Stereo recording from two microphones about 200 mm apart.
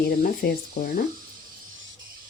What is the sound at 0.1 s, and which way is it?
Speech, 45° left (ahead or behind).